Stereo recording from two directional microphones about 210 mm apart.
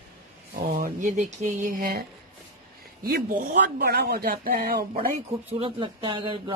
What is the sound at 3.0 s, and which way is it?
Speech, 45° right (ahead or behind).